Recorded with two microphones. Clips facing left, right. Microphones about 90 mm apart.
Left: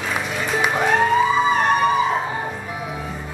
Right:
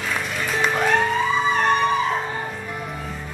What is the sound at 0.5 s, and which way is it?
Music, 5° left (ahead or behind).